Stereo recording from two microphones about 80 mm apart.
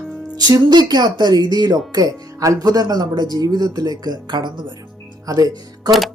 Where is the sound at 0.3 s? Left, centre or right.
Right.